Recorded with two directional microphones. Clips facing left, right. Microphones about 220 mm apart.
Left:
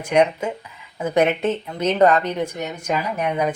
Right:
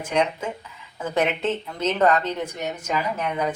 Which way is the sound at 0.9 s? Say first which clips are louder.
Left 5 dB; 15° left (ahead or behind).